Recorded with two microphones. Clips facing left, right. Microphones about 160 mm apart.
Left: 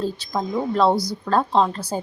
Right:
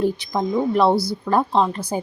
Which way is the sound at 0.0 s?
15° right (ahead or behind).